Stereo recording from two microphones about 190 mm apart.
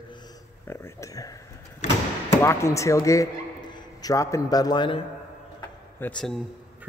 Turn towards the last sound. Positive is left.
turn(degrees=5)  # may be behind; listen again after turning